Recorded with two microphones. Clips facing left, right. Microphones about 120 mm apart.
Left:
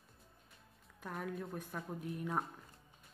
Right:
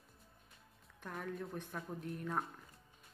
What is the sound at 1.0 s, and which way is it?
A woman's voice, 5° left (ahead or behind).